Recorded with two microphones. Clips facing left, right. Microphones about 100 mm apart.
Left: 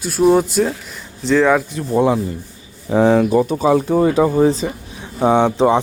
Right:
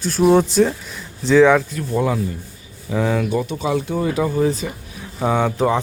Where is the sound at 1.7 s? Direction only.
25° left (ahead or behind).